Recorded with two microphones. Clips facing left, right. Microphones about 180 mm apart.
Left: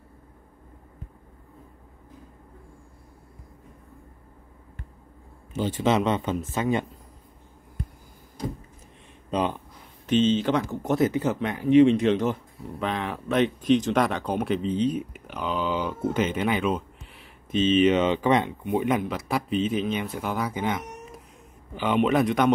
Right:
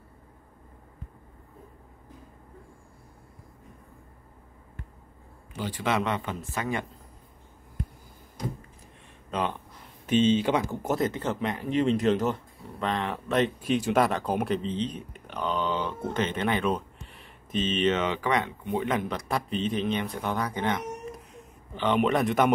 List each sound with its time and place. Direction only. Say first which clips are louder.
5.5 s speech: left 5 dB; 25° left (ahead or behind)
9.3 s a sound: left 4 dB; 15° left (ahead or behind)
10.0 s speech: left 1 dB; 10° right (ahead or behind)
11.0 s speech: left 5 dB; 10° left (ahead or behind)
14.7 s speech: left 7 dB; 10° left (ahead or behind)
17.9 s speech: left 5 dB; 20° left (ahead or behind); by 22.5 s centre (ahead or behind)